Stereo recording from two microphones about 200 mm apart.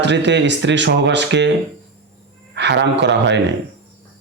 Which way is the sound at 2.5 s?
60° right (ahead or behind).